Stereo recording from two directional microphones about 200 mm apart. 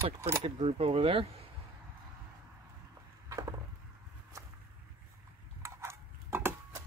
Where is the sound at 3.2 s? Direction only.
15° right (ahead or behind).